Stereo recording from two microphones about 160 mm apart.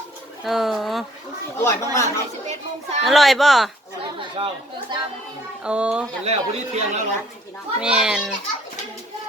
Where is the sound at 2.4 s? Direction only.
45° right (ahead or behind).